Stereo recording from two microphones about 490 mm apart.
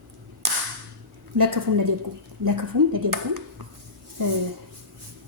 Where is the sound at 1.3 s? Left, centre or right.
Right.